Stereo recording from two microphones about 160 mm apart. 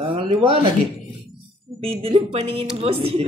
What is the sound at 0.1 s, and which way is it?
Speech, 35° right (ahead or behind).